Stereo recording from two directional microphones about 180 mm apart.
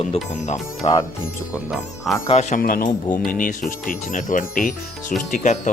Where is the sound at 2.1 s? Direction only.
Centre (ahead or behind).